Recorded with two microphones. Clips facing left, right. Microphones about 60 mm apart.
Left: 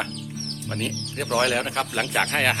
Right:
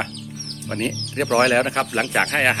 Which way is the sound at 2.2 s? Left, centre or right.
Right.